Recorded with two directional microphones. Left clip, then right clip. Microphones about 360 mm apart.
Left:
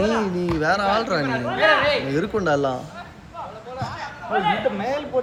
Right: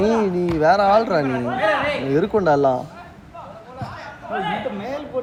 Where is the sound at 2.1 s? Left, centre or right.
Centre.